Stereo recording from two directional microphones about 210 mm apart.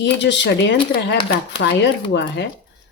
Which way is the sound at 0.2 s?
60° left (ahead or behind).